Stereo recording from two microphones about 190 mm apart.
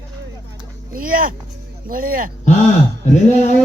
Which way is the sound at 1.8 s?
50° right (ahead or behind).